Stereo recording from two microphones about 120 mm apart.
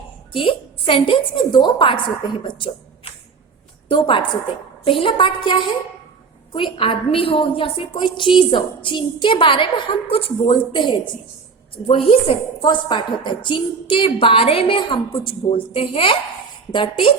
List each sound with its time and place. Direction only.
0.3 s a woman's voice: 45° left (ahead or behind)